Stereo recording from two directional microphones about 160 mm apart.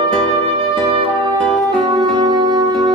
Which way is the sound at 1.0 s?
25° right (ahead or behind).